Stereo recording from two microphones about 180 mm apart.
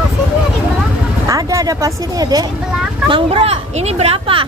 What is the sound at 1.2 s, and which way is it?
A woman's voice, 20° right (ahead or behind).